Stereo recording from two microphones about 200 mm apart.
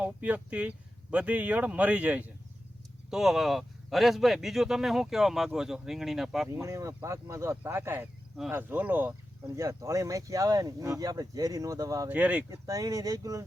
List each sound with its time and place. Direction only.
0.0 s speech: 5° right (ahead or behind)
6.5 s speech: 15° right (ahead or behind)